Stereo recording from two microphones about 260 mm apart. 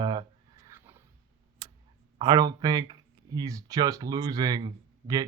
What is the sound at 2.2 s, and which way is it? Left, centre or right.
Speech, centre.